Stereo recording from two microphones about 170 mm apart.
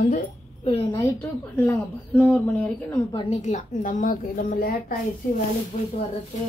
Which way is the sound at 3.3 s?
45° left (ahead or behind).